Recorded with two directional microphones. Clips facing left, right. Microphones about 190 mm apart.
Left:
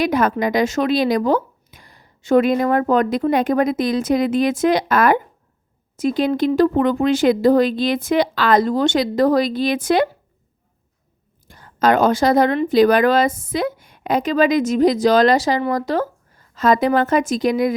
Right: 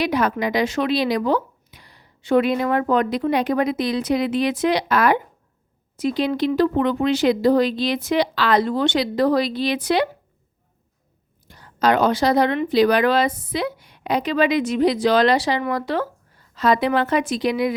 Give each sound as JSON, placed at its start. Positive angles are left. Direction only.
{"t": 0.0, "sound": "a woman's voice", "side_deg": 50}
{"t": 11.4, "sound": "a woman's voice", "side_deg": 50}